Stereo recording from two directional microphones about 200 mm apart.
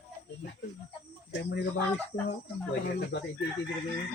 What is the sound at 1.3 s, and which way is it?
Speech, 60° left (ahead or behind).